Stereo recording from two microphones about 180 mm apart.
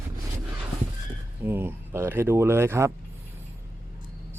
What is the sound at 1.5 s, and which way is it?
Speech, 10° right (ahead or behind).